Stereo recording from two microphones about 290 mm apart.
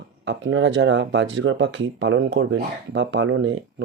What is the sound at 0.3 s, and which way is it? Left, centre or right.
Speech, right.